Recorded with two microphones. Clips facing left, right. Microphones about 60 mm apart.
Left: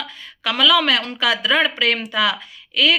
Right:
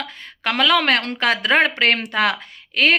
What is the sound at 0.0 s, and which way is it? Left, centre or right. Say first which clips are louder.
Speech: right 1 dB; right.